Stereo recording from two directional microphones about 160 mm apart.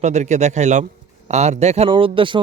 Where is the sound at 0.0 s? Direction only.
45° right (ahead or behind).